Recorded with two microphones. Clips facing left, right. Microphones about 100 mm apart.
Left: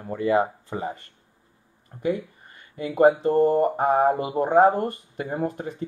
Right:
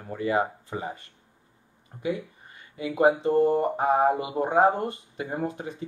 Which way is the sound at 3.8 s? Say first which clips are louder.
Left 2 dB; 5° right (ahead or behind).